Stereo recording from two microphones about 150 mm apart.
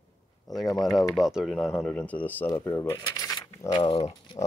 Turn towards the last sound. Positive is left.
turn(degrees=40)  # may be behind; listen again after turning